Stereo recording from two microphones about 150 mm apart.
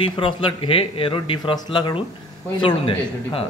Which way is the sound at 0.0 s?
35° left (ahead or behind).